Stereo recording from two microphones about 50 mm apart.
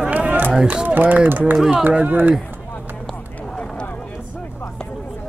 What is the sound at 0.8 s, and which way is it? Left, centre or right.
Speech, right.